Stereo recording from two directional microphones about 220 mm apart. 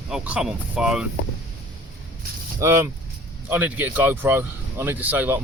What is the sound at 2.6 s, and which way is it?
Speech, 15° right (ahead or behind).